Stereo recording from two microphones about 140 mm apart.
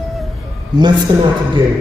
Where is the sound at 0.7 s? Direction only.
30° right (ahead or behind).